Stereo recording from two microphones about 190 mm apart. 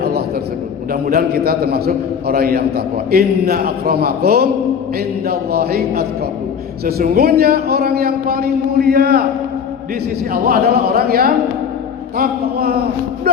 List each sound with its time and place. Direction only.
1.0 s a man's voice: 50° right (ahead or behind)
10.3 s a man's voice: 50° right (ahead or behind)